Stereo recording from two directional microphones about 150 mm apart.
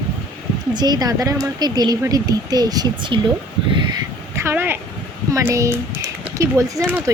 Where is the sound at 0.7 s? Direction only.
25° right (ahead or behind).